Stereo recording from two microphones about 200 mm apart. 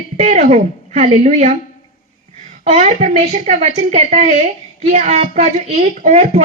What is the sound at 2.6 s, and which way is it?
A woman's voice, 35° right (ahead or behind).